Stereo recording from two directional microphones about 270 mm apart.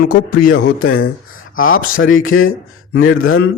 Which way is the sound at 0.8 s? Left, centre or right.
Left.